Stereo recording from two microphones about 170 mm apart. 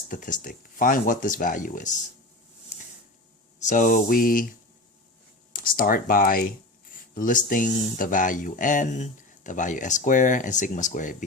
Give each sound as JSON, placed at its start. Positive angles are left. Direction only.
{"t": 0.1, "sound": "speech", "side_deg": 50}
{"t": 2.7, "sound": "a sound", "side_deg": 45}
{"t": 3.7, "sound": "speech", "side_deg": 50}
{"t": 5.5, "sound": "speech", "side_deg": 55}